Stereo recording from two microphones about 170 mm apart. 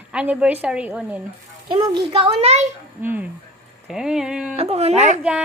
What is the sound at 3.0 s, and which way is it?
A woman's voice, 10° right (ahead or behind).